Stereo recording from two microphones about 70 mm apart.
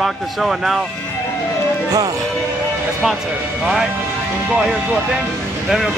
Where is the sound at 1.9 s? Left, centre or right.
Right.